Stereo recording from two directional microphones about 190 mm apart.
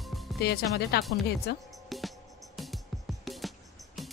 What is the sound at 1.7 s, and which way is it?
Music, centre (ahead or behind).